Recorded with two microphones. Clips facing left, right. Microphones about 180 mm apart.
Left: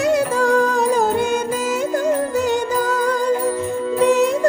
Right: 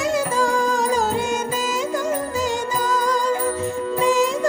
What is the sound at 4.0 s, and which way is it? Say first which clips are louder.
Music: left 4 dB; 60° left (ahead or behind).